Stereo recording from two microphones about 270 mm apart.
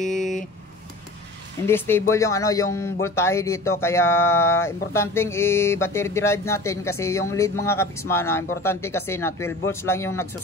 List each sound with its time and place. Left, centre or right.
0.0 s vehicle: centre
1.7 s speech: centre